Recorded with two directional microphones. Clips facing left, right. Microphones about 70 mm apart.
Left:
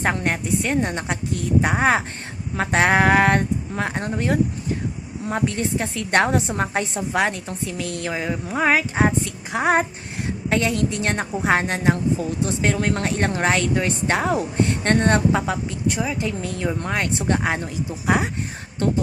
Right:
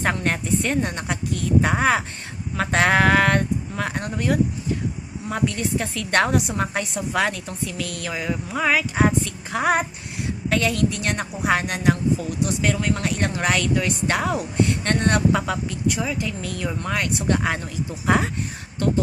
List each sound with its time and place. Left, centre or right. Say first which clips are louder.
0.0 s a woman's voice: left 1 dB; left
0.8 s a woman's voice: left 1 dB; left
18.8 s a woman's voice: left 1 dB; left